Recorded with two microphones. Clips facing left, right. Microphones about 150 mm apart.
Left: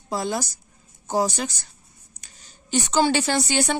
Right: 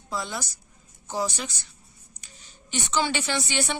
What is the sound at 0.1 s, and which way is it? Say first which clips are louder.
A woman's voice: left 6 dB; 40° left (ahead or behind).